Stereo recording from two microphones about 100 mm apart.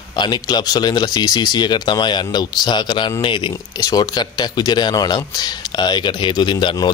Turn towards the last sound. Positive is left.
turn(degrees=50)  # may be behind; listen again after turning